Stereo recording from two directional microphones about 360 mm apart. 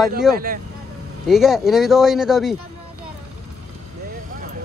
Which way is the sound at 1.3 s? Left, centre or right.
Centre.